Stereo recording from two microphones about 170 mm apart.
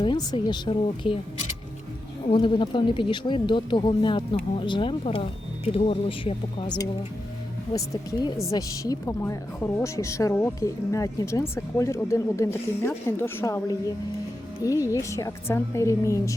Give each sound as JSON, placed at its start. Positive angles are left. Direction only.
{"t": 0.0, "sound": "speech", "side_deg": 25}
{"t": 2.3, "sound": "a woman's voice", "side_deg": 30}